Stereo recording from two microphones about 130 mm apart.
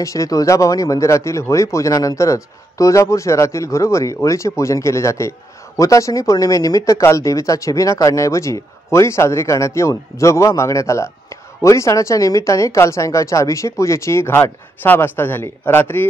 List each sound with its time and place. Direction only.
0.0 s speech: 25° left (ahead or behind)